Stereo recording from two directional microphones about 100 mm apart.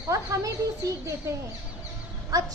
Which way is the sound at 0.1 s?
35° right (ahead or behind).